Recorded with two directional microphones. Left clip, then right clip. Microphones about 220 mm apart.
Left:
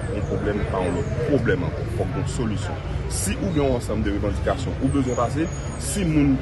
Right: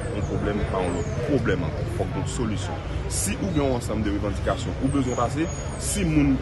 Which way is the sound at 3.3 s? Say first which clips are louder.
Left 3 dB; 5° right (ahead or behind).